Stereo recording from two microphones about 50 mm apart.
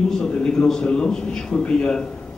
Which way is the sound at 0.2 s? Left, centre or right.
Centre.